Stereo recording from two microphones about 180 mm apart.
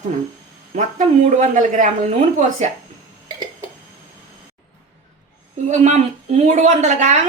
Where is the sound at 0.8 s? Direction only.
45° right (ahead or behind).